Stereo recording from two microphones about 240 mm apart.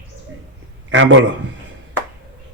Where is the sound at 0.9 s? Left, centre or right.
Right.